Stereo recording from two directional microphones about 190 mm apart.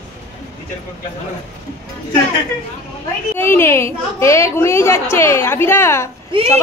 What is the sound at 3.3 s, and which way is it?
A woman's voice, 10° left (ahead or behind).